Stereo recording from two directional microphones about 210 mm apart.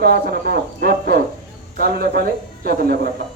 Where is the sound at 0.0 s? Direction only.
50° right (ahead or behind).